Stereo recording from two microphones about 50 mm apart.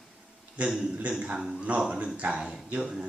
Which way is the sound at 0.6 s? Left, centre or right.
Right.